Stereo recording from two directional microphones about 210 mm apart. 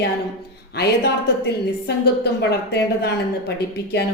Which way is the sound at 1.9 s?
50° left (ahead or behind).